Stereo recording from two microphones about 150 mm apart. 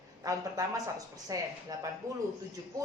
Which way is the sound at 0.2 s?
20° right (ahead or behind).